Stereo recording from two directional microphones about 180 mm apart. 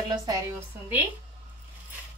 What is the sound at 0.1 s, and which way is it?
Speech, 20° right (ahead or behind).